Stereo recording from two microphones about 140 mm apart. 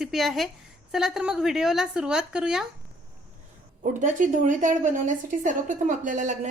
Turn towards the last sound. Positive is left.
turn(degrees=-65)  # may be behind; listen again after turning